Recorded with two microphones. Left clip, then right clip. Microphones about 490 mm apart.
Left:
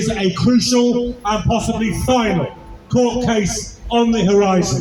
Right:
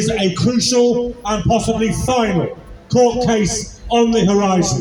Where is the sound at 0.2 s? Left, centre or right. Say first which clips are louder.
Left 1 dB; left.